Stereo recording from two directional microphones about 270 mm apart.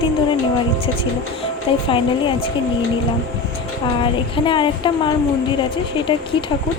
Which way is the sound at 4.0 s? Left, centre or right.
Centre.